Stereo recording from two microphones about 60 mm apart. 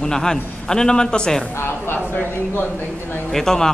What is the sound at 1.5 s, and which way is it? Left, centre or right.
Speech, left.